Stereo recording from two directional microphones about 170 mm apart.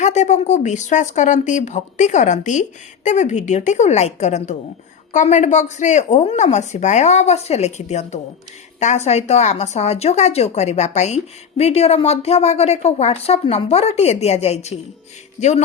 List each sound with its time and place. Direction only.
0.0 s a woman's voice: 45° left (ahead or behind)